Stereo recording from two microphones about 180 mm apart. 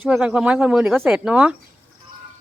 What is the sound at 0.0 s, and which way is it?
Speech, 5° right (ahead or behind).